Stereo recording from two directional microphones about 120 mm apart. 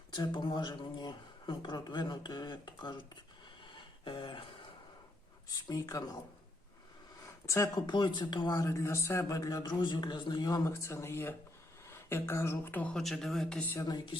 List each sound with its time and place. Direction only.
0.1 s speech: 40° left (ahead or behind)
4.0 s a sound: 45° left (ahead or behind)
5.6 s speech: 30° left (ahead or behind)
7.4 s speech: 25° left (ahead or behind)
7.8 s speech: 40° left (ahead or behind); by 13.0 s 15° left (ahead or behind)
13.0 s speech: centre (ahead or behind)
13.8 s speech: 40° left (ahead or behind)